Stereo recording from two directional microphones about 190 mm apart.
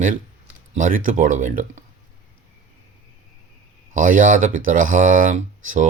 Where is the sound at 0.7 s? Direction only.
45° right (ahead or behind).